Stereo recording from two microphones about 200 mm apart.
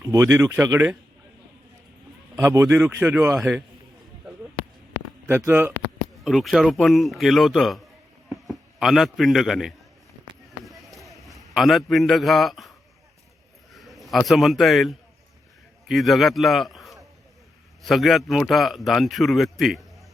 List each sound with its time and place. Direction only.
0.0 s speech: 15° right (ahead or behind)
2.3 s speech: 15° right (ahead or behind)
2.6 s a man's voice: centre (ahead or behind)
5.5 s speech: 10° right (ahead or behind)
6.2 s a man's voice: centre (ahead or behind)
10.6 s run: centre (ahead or behind)
11.5 s a man's voice: centre (ahead or behind)
13.7 s a man's voice: centre (ahead or behind)